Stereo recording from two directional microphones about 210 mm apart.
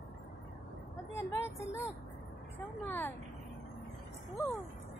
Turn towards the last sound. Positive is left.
turn(degrees=15)  # may be behind; listen again after turning